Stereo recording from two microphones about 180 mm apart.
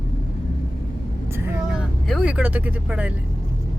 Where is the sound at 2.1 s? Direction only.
5° right (ahead or behind).